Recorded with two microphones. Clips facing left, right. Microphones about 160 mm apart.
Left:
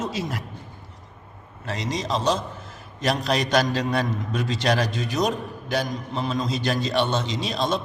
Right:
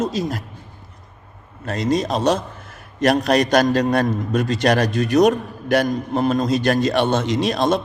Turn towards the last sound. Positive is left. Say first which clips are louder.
# right 7 dB
turn(degrees=-60)  # may be behind; listen again after turning